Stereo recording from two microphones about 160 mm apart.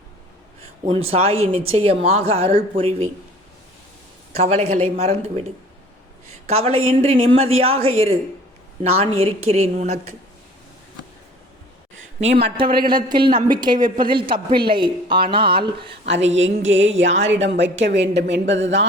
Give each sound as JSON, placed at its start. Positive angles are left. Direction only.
{"t": 0.9, "sound": "speech", "side_deg": -35}
{"t": 4.4, "sound": "speech", "side_deg": -40}
{"t": 6.5, "sound": "a woman's voice", "side_deg": -40}
{"t": 12.3, "sound": "a woman's voice", "side_deg": -90}
{"t": 12.5, "sound": "a woman's voice", "side_deg": -30}
{"t": 16.7, "sound": "a woman's voice", "side_deg": -45}
{"t": 17.3, "sound": "a woman's voice", "side_deg": -90}